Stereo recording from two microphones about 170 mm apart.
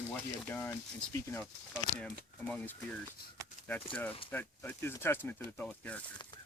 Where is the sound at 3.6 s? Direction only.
45° left (ahead or behind).